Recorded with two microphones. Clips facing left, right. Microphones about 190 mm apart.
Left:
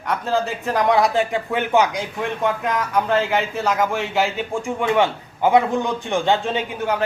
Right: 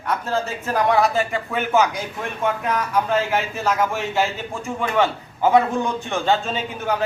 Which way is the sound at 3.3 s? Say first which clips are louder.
Left 1 dB; 15° left (ahead or behind).